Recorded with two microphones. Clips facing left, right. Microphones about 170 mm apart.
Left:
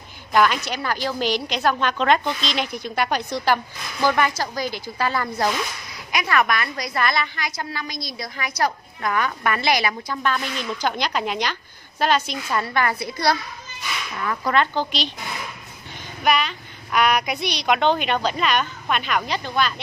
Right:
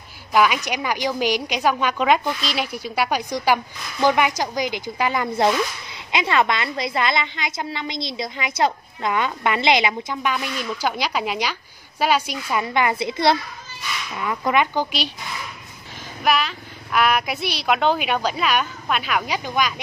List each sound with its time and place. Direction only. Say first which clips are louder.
0.3 s a woman's voice: right 1 dB; 10° right (ahead or behind)
16.3 s a woman's voice: even; centre (ahead or behind)